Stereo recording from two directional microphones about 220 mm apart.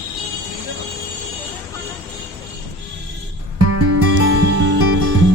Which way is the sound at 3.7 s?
90° right.